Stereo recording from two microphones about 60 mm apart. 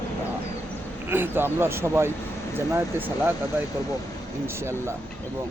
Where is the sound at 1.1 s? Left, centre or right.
Right.